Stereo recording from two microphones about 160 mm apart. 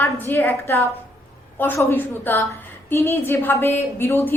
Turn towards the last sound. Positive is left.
turn(degrees=15)  # may be behind; listen again after turning